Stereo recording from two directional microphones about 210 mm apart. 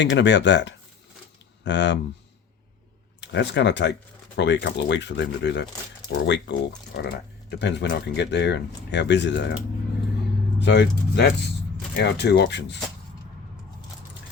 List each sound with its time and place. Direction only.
0.0 s speech: 55° left (ahead or behind)
3.2 s speech: 55° left (ahead or behind)
10.6 s speech: 55° left (ahead or behind)